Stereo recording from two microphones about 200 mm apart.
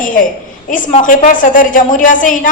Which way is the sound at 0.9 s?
40° left (ahead or behind).